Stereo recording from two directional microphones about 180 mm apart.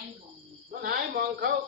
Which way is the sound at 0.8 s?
55° right (ahead or behind).